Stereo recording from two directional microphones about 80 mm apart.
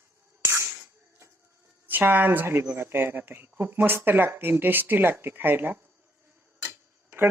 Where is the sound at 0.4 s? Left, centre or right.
Right.